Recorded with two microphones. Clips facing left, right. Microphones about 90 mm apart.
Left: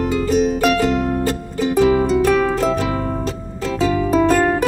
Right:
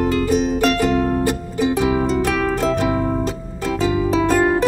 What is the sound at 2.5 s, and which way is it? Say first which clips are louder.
Music: even; 20° right (ahead or behind).